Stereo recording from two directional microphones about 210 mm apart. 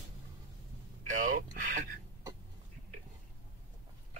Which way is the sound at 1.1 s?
35° right (ahead or behind).